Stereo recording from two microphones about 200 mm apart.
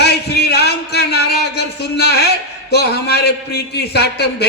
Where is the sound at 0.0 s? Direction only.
55° left (ahead or behind).